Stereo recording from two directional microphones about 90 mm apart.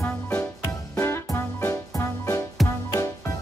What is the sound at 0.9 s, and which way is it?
Music, 30° left (ahead or behind).